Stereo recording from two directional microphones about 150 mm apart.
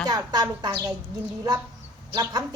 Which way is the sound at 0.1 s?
25° right (ahead or behind).